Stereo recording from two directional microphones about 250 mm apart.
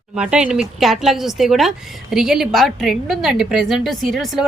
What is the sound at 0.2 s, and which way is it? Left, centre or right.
A woman's voice, centre.